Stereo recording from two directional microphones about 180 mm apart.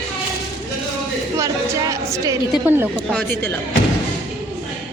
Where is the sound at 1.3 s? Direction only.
20° right (ahead or behind).